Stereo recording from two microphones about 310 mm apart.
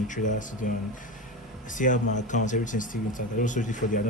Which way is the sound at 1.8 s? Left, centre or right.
Left.